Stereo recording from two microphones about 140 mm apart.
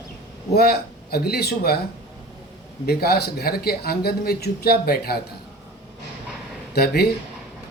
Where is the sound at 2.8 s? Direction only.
90° left.